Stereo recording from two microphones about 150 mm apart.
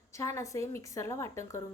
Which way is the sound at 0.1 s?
20° left (ahead or behind).